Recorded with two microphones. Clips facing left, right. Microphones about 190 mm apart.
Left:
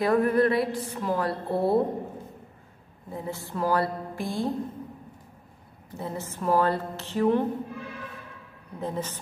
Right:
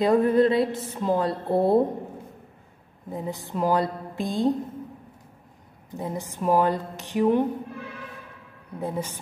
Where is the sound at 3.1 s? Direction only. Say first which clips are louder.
Right 3 dB; 15° right (ahead or behind).